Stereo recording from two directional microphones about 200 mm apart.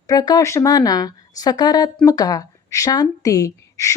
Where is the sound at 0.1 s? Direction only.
20° left (ahead or behind).